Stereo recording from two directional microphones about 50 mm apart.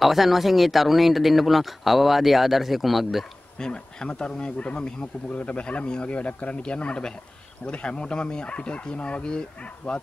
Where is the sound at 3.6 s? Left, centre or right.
Centre.